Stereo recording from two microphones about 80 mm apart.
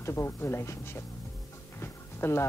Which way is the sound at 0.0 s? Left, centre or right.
Left.